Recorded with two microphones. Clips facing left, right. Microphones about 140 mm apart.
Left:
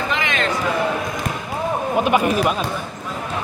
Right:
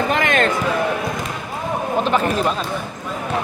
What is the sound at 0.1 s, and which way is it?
Basketball bounce, 50° right (ahead or behind).